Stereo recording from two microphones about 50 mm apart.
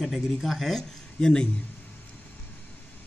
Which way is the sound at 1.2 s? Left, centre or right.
Centre.